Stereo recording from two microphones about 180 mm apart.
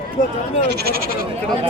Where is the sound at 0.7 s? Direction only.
60° right (ahead or behind).